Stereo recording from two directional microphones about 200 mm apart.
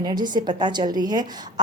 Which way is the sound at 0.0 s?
20° right (ahead or behind).